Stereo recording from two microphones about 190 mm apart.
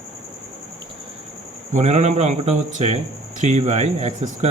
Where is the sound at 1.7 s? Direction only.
35° right (ahead or behind).